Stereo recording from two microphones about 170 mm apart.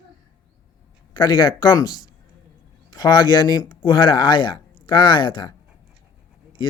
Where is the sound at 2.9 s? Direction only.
25° left (ahead or behind).